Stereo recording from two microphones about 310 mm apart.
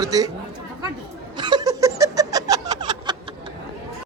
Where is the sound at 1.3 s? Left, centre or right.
Centre.